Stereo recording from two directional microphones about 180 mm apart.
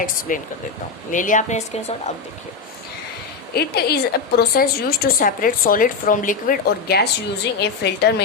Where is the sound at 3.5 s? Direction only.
60° left (ahead or behind).